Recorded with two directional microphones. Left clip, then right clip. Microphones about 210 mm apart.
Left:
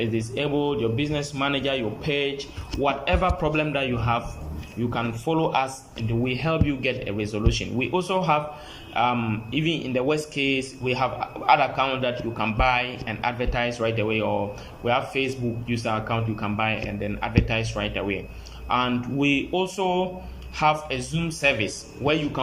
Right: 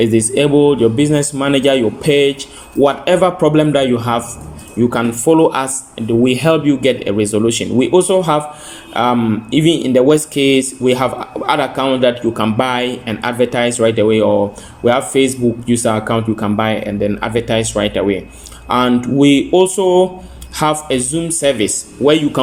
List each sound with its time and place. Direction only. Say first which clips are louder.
0.0 s speech: right 14 dB; 45° right (ahead or behind)